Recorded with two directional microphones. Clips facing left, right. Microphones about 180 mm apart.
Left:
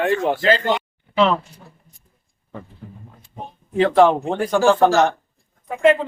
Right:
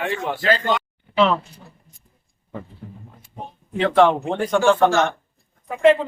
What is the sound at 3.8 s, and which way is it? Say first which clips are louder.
Speech: left 2 dB; 5° left (ahead or behind).